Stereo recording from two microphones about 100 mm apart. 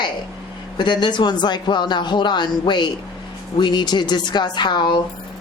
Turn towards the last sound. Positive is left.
turn(degrees=50)  # may be behind; listen again after turning